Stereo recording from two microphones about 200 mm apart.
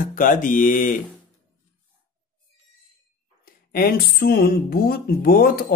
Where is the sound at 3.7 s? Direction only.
50° left (ahead or behind).